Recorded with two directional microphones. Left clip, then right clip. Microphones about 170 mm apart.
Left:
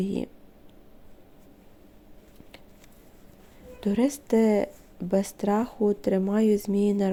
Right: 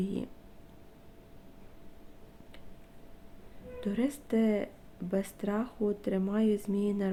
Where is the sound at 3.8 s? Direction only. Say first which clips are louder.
Left 7 dB; 40° left (ahead or behind).